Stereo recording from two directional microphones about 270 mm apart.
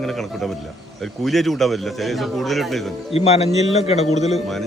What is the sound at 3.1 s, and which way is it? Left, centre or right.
A man's voice, left.